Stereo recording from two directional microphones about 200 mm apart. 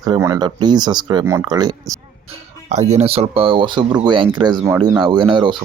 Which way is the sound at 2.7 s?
35° right (ahead or behind).